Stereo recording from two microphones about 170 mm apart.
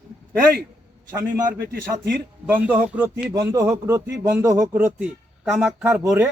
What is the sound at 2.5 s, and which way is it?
Speech, 10° right (ahead or behind).